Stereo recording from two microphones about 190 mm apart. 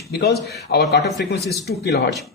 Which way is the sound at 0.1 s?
60° left (ahead or behind).